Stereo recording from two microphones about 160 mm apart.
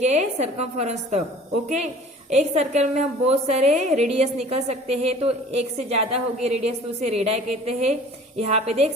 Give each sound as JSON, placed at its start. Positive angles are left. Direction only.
{"t": 0.0, "sound": "a woman's voice", "side_deg": -45}
{"t": 2.3, "sound": "a woman's voice", "side_deg": -45}